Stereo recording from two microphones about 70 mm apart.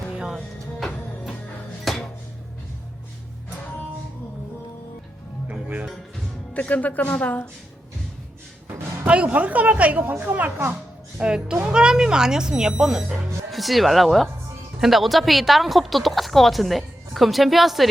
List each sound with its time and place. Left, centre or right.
0.3 s music: centre
1.9 s dishes: centre
5.5 s music: right
6.5 s speech: left
9.0 s speech: centre
11.2 s speech: centre